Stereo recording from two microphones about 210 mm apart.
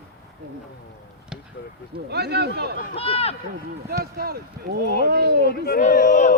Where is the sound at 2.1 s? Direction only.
50° right (ahead or behind).